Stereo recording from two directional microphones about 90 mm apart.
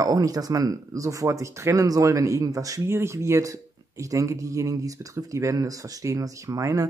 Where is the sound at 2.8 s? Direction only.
30° right (ahead or behind).